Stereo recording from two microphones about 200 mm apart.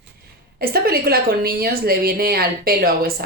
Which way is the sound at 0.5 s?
50° right (ahead or behind).